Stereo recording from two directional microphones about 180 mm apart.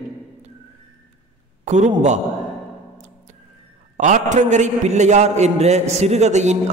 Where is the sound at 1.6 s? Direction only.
40° right (ahead or behind).